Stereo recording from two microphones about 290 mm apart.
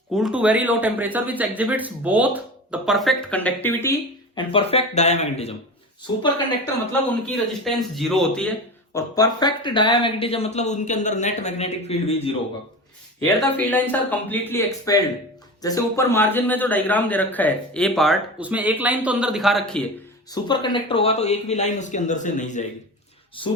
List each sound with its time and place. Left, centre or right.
0.1 s a man's voice: centre; by 5.5 s left
7.3 s a man's voice: centre; by 12.4 s left
13.2 s a man's voice: centre
20.3 s a man's voice: centre